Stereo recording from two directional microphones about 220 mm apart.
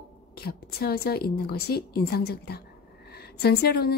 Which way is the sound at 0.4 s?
45° left (ahead or behind).